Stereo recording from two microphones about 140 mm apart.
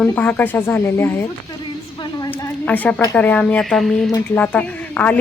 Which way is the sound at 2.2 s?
15° left (ahead or behind).